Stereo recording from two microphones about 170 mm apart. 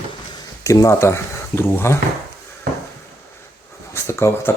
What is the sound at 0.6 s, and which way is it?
Speech, 20° left (ahead or behind).